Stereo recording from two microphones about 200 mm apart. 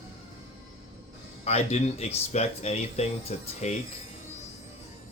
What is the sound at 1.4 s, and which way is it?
Speech, 30° left (ahead or behind).